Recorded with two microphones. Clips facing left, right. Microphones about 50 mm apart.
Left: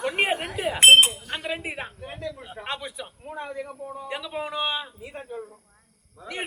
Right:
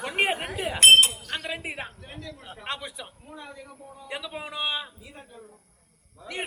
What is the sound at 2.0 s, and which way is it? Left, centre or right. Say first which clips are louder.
Speech: left 7 dB; left.